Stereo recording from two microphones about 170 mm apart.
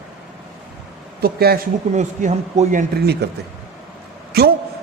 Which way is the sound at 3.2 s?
70° right (ahead or behind).